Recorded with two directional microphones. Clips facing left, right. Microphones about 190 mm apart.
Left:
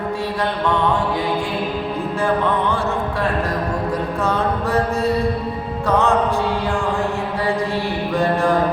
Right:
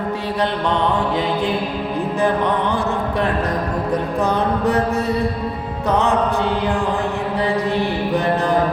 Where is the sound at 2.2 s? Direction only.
15° right (ahead or behind).